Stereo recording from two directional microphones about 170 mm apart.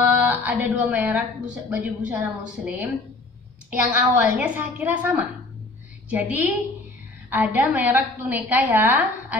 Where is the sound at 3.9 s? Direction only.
10° right (ahead or behind).